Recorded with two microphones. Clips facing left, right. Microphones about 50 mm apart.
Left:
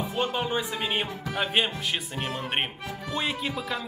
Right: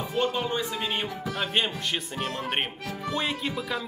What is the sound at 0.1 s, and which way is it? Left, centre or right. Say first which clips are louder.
Speech: right 2 dB; centre.